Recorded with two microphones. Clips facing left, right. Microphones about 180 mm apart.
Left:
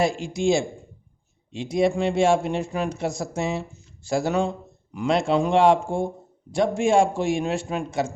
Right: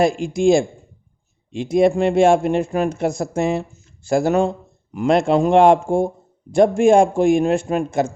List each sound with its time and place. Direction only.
0.2 s a man's voice: 50° right (ahead or behind)